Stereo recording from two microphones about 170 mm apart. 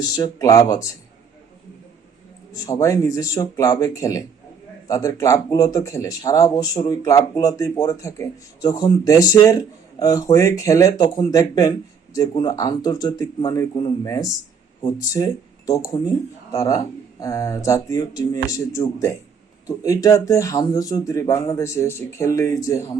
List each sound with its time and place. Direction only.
0.2 s speech: 20° left (ahead or behind)
2.5 s speech: 20° left (ahead or behind)